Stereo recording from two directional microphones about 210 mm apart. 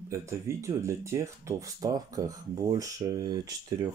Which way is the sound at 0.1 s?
15° right (ahead or behind).